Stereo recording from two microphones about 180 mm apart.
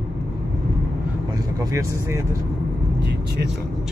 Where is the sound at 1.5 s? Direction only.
15° right (ahead or behind).